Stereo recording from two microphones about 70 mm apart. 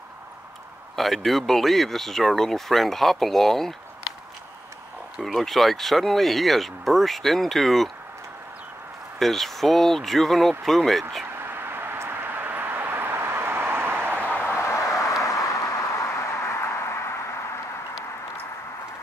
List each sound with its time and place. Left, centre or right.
0.9 s speech: centre
5.2 s speech: centre
9.2 s speech: centre
11.3 s vehicle: right
14.2 s a sound: left